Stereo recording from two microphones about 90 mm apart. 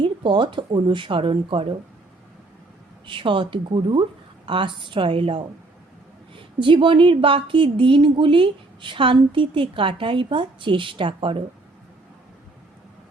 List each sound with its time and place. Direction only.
0.0 s speech: 65° right (ahead or behind); by 1.6 s 80° right
3.1 s speech: 65° right (ahead or behind)